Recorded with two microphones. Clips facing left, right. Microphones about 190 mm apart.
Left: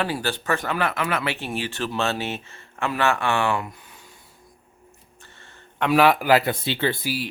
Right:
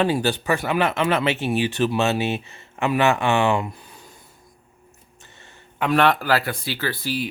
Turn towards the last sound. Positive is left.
turn(degrees=5)  # may be behind; listen again after turning